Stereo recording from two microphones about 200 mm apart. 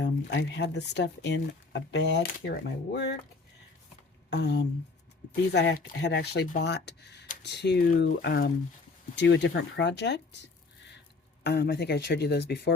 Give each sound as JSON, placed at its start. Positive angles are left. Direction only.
{"t": 0.0, "sound": "speech", "side_deg": 60}
{"t": 4.3, "sound": "speech", "side_deg": 55}
{"t": 9.1, "sound": "speech", "side_deg": 60}
{"t": 11.4, "sound": "speech", "side_deg": 55}